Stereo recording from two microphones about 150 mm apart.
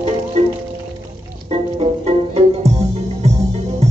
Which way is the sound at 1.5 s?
40° right (ahead or behind).